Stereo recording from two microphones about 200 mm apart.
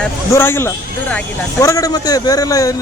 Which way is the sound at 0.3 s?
10° left (ahead or behind).